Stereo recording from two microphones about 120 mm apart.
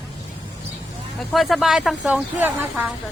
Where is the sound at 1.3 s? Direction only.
Centre (ahead or behind).